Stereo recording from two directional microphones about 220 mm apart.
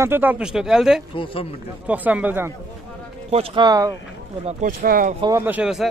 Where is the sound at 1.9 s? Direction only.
5° right (ahead or behind).